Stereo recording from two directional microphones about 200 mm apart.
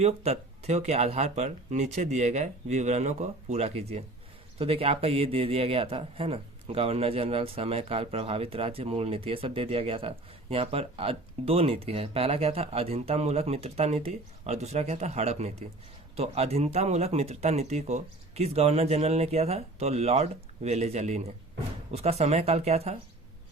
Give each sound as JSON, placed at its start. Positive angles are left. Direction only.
{"t": 0.0, "sound": "speech", "side_deg": -35}